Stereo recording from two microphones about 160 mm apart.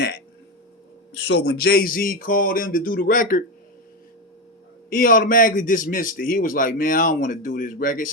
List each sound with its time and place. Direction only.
1.3 s a man's voice: 85° left; by 3.4 s 60° left (ahead or behind)
4.9 s a man's voice: 60° left (ahead or behind)